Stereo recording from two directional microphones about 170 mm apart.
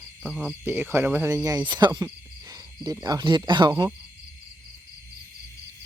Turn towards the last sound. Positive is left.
turn(degrees=-25)  # may be behind; listen again after turning